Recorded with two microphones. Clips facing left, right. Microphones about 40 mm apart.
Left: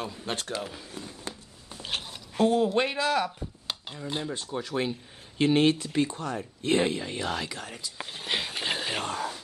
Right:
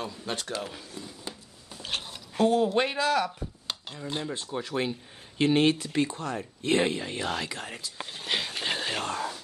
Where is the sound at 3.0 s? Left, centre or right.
Centre.